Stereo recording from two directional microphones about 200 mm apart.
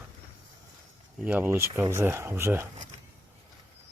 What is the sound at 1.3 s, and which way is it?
Speech, 10° right (ahead or behind).